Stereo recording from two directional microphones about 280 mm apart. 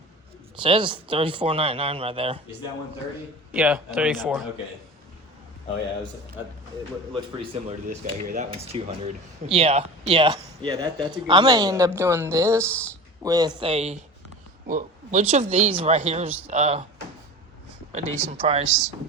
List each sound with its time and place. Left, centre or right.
0.5 s speech: centre
3.5 s speech: centre
7.1 s speech: right
17.9 s speech: right